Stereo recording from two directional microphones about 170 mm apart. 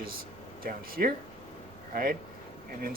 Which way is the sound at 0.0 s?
60° right (ahead or behind).